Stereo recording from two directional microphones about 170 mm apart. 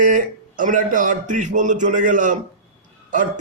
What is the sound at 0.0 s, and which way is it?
A man's voice, 50° right (ahead or behind).